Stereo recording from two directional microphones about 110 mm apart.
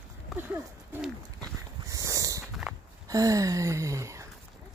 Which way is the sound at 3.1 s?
30° right (ahead or behind).